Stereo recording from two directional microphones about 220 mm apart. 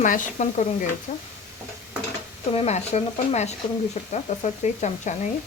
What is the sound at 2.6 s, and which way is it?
Speech, 30° left (ahead or behind).